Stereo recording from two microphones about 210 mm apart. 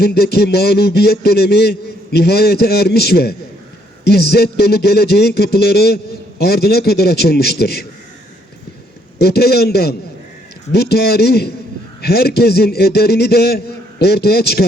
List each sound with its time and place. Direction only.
0.0 s a man's voice: 50° left (ahead or behind)
9.1 s a man's voice: 50° left (ahead or behind)